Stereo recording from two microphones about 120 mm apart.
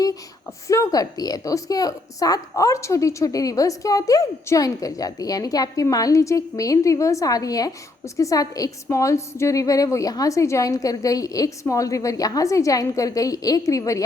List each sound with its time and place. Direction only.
0.7 s a woman's voice: 30° left (ahead or behind)